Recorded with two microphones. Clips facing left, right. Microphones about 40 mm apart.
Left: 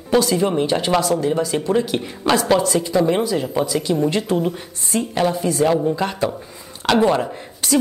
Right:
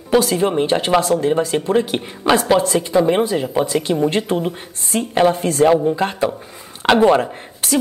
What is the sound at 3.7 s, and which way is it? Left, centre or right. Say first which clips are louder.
A woman's voice: right 2 dB; right.